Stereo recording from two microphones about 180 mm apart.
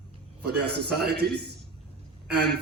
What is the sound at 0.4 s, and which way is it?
Speech, 65° right (ahead or behind).